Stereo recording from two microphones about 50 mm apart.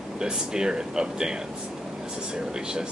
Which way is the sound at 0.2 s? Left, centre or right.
Centre.